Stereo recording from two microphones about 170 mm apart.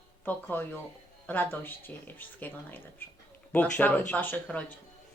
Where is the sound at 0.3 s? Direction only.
10° left (ahead or behind).